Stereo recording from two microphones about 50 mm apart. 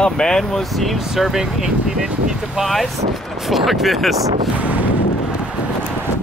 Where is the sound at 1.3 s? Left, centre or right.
Centre.